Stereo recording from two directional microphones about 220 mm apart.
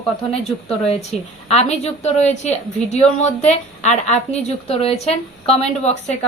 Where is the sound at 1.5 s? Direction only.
30° left (ahead or behind).